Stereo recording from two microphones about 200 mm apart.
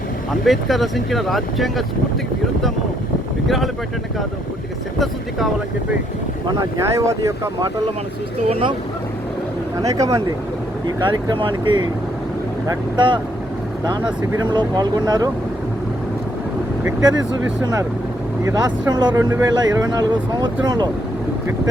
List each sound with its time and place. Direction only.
0.4 s speech: centre (ahead or behind)
6.5 s speech: 15° right (ahead or behind)
8.4 s speech: 30° right (ahead or behind)
9.8 s speech: 15° right (ahead or behind)
16.8 s speech: 20° right (ahead or behind)